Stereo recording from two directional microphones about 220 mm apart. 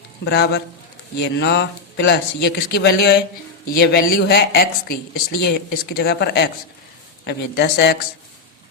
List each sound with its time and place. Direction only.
0.3 s speech: 50° left (ahead or behind)